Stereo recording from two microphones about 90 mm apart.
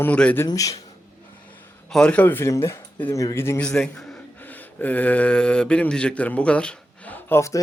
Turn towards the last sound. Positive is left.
turn(degrees=35)  # may be behind; listen again after turning